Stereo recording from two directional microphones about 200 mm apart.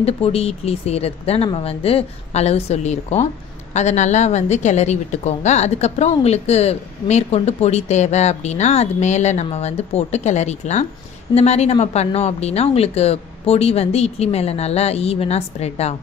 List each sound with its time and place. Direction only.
0.0 s a woman's voice: 30° left (ahead or behind)